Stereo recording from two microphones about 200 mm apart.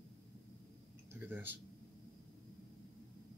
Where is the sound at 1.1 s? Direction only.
10° right (ahead or behind).